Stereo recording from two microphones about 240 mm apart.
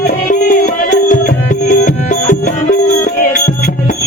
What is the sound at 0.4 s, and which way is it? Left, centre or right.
Music, left.